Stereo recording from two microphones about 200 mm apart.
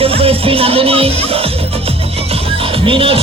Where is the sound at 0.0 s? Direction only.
30° right (ahead or behind).